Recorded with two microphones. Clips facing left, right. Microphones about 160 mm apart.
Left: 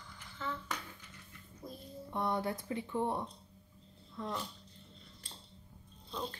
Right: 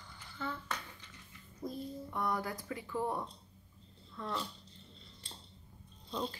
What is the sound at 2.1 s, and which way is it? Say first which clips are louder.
Speech: left 3 dB; 25° left (ahead or behind).